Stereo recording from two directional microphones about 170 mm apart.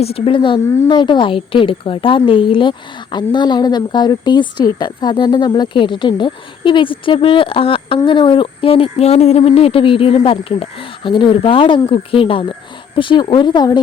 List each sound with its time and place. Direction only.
0.0 s a woman's voice: 35° left (ahead or behind)